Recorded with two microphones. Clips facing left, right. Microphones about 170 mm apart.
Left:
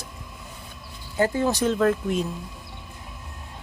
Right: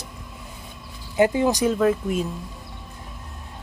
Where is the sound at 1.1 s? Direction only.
15° right (ahead or behind).